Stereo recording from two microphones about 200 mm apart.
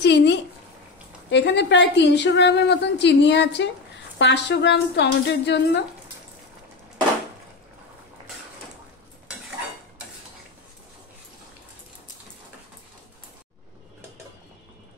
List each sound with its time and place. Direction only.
0.0 s a woman's voice: 60° left (ahead or behind)